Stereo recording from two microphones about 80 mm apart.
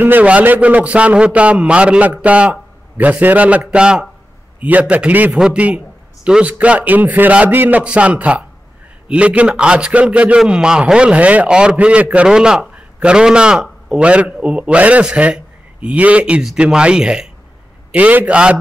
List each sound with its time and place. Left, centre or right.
0.0 s a man's voice: right